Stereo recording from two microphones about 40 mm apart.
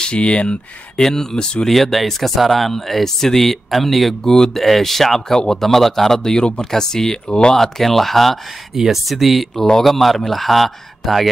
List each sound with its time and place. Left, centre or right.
0.0 s speech: left
1.0 s speech: centre
1.7 s speech: centre
4.3 s speech: centre
4.6 s speech: centre
8.7 s speech: centre